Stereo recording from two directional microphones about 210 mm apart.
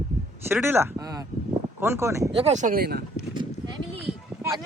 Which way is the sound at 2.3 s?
30° right (ahead or behind).